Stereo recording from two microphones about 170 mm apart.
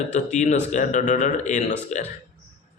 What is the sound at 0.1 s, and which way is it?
A man's voice, 45° left (ahead or behind).